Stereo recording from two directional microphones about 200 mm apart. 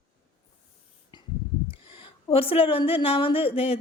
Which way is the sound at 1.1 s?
20° left (ahead or behind).